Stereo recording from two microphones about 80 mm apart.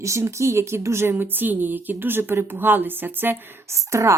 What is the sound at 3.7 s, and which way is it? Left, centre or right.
Speech, right.